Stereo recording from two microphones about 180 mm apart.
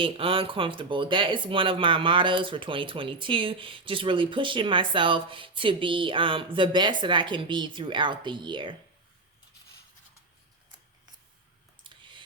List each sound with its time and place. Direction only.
0.0 s speech: 30° right (ahead or behind)
11.8 s clicking: 25° right (ahead or behind)